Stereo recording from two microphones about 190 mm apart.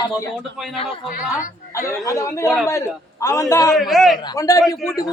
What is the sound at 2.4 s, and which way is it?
Speech, centre (ahead or behind).